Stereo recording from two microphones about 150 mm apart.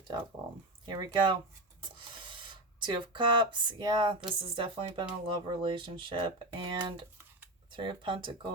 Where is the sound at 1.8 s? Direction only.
35° right (ahead or behind).